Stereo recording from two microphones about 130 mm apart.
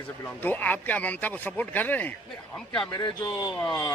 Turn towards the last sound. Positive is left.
turn(degrees=25)  # may be behind; listen again after turning